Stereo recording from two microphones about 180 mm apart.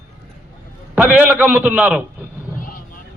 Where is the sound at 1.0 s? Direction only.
10° right (ahead or behind).